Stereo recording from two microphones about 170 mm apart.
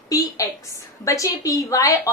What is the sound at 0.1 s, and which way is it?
A woman's voice, 20° left (ahead or behind).